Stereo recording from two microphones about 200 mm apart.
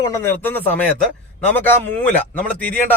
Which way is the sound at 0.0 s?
15° left (ahead or behind).